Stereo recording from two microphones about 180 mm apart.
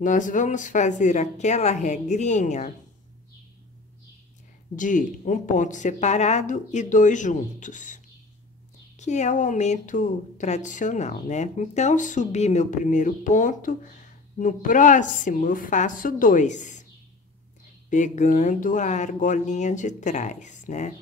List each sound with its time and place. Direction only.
0.0 s a woman's voice: 45° left (ahead or behind)
4.7 s speech: 45° left (ahead or behind)
9.0 s speech: 40° left (ahead or behind)
17.8 s speech: 45° left (ahead or behind)